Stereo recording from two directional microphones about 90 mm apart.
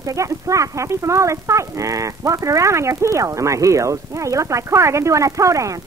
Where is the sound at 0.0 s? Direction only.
35° right (ahead or behind).